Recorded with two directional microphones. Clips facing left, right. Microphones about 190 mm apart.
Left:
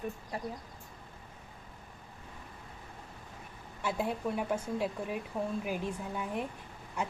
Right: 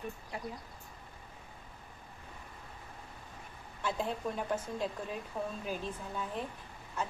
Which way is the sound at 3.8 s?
10° left (ahead or behind).